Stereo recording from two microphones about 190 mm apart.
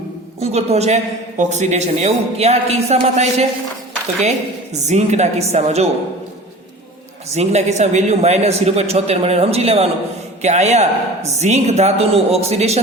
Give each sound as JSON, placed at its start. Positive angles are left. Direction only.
{"t": 0.3, "sound": "a woman's voice", "side_deg": -35}
{"t": 4.8, "sound": "a woman's voice", "side_deg": -35}
{"t": 7.3, "sound": "a woman's voice", "side_deg": -35}